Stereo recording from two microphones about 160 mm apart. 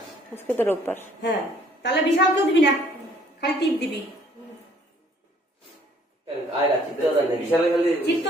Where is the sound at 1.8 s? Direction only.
90° left.